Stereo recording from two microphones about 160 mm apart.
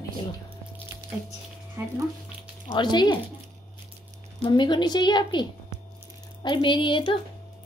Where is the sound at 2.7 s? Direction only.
30° left (ahead or behind).